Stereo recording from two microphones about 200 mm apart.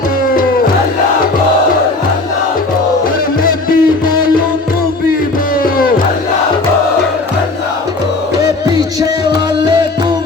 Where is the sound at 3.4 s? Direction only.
45° left (ahead or behind).